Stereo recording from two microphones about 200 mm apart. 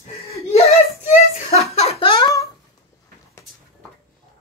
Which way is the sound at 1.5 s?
30° left (ahead or behind).